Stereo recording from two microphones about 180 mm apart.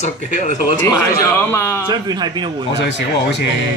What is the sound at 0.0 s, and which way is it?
Speech, 45° left (ahead or behind).